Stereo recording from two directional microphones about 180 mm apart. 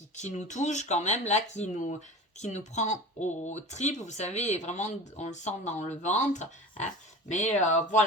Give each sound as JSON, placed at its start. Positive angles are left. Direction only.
{"t": 0.2, "sound": "speech", "side_deg": 40}